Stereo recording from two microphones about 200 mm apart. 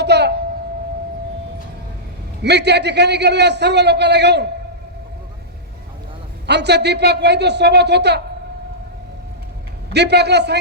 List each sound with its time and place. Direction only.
0.0 s a sound: 55° right (ahead or behind)
2.4 s a man's voice: 55° right (ahead or behind)
6.5 s a man's voice: 55° right (ahead or behind)
9.9 s a man's voice: 55° right (ahead or behind)